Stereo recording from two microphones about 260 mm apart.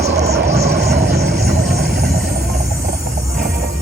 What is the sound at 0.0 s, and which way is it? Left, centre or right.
Vehicle, right.